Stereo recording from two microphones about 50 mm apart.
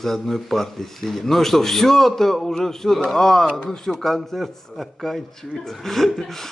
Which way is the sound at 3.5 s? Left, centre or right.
Left.